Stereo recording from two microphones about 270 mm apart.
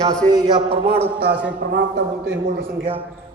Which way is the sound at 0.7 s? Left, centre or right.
Right.